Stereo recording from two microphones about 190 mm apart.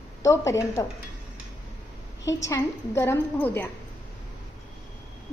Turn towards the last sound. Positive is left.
turn(degrees=10)  # may be behind; listen again after turning